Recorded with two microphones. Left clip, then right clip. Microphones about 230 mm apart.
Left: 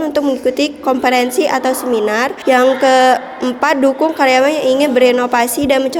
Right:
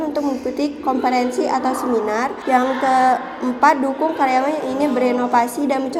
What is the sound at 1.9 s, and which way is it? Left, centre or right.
Speech, left.